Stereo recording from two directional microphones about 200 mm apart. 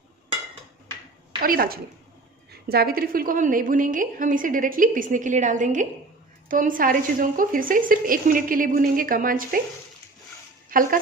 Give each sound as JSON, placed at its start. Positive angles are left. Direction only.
{"t": 1.4, "sound": "a woman's voice", "side_deg": -45}
{"t": 10.7, "sound": "speech", "side_deg": -45}